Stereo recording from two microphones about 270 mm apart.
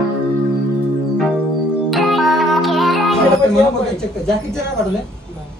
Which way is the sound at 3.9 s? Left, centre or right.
Centre.